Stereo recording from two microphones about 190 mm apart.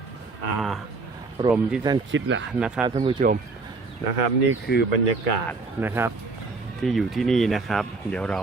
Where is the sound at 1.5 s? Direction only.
5° right (ahead or behind).